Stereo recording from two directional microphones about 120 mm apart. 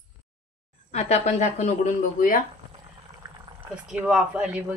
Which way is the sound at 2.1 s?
90° left.